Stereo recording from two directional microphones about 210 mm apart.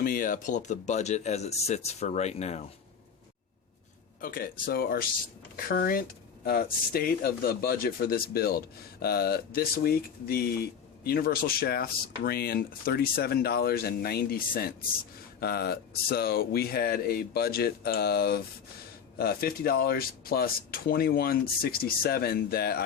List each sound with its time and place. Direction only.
0.0 s speech: 40° left (ahead or behind)
4.2 s speech: 45° left (ahead or behind)